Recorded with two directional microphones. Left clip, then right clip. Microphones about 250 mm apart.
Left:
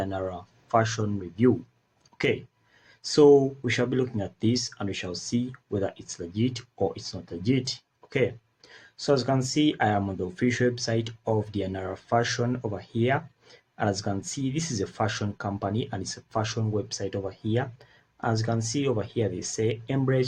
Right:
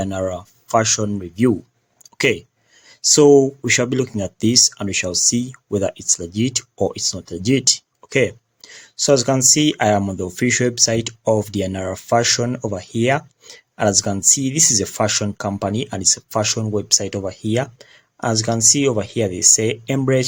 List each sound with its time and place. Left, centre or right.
0.0 s speech: right
2.0 s a sound: right
3.0 s speech: right